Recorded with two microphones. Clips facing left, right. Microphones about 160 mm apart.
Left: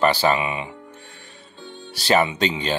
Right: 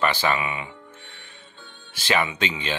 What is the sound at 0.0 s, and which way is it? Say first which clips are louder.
Speech: left 4 dB; 35° left (ahead or behind).